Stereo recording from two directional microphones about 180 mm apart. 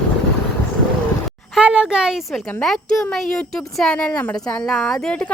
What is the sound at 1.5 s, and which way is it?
Speech, 5° right (ahead or behind).